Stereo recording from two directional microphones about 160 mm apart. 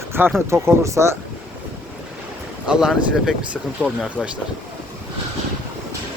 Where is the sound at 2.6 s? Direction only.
5° right (ahead or behind).